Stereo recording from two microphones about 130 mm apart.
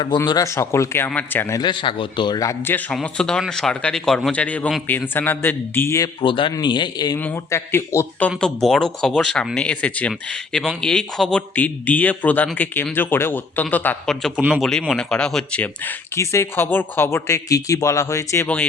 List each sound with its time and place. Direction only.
0.3 s speech: 25° left (ahead or behind)
1.5 s a man's voice: 35° left (ahead or behind); by 2.8 s 15° left (ahead or behind)
2.9 s speech: 5° left (ahead or behind)
6.2 s a man's voice: 40° left (ahead or behind)
7.2 s speech: 15° left (ahead or behind)
8.4 s speech: 5° left (ahead or behind)
14.7 s speech: 5° left (ahead or behind); by 18.4 s 25° left (ahead or behind)